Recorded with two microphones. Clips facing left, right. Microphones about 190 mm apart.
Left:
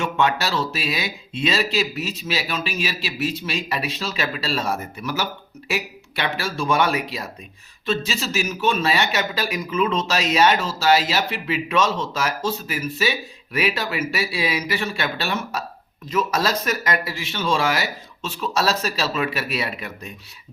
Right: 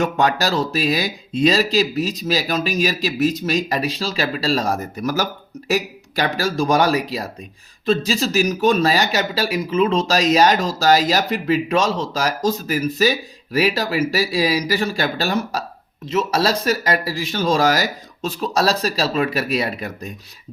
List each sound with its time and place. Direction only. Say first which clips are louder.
0.0 s speech: right 3 dB; 40° right (ahead or behind)